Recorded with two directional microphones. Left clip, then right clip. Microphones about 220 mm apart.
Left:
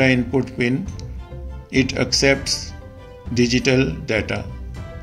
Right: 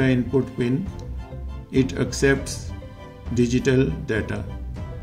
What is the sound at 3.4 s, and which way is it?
Speech, 30° right (ahead or behind).